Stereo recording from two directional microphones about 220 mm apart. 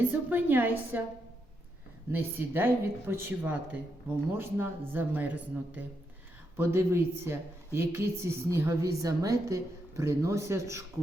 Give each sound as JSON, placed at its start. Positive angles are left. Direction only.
{"t": 0.1, "sound": "a woman's voice", "side_deg": -10}
{"t": 2.1, "sound": "a woman's voice", "side_deg": -10}